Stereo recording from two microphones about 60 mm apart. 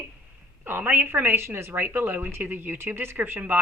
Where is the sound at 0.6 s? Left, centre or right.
Right.